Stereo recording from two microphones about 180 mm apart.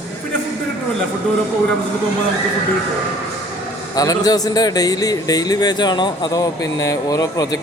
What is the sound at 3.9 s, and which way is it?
A man's voice, 20° left (ahead or behind).